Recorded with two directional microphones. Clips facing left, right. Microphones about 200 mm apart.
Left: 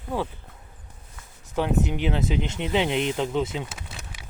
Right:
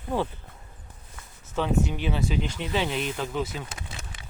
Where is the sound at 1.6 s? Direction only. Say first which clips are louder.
Left 2 dB; 15° left (ahead or behind).